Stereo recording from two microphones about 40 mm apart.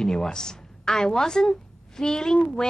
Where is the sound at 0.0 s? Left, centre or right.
Centre.